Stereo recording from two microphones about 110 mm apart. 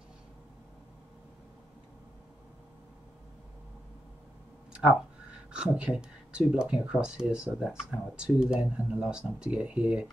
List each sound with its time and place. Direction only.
5.5 s speech: 10° right (ahead or behind)